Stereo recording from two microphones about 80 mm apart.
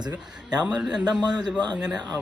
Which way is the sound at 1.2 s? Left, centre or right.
Right.